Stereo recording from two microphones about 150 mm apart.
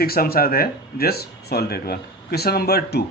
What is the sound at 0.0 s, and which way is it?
A man's voice, 90° left.